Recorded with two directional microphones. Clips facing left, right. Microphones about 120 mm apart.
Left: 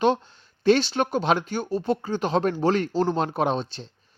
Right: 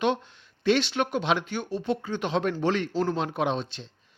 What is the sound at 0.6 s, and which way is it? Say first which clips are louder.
Speech: left 4 dB; 35° left (ahead or behind).